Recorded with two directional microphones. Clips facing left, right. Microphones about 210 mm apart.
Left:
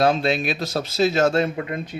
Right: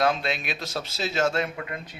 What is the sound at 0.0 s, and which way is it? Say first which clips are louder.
Speech: left 6 dB; 30° left (ahead or behind).